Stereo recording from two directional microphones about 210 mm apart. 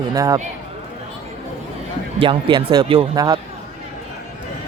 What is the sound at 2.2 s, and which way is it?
Speech, 25° right (ahead or behind).